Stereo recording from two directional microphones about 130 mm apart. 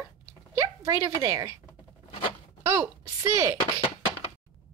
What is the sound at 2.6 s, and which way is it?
Speech, 20° right (ahead or behind).